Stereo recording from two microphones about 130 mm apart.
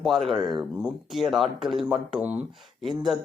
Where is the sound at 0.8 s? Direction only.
Centre (ahead or behind).